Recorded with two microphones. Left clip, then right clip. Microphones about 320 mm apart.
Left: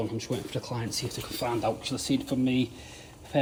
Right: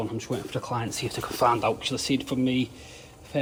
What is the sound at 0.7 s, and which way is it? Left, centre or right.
Speech, right.